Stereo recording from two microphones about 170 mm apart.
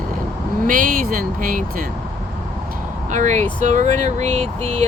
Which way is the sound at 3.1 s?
45° right (ahead or behind).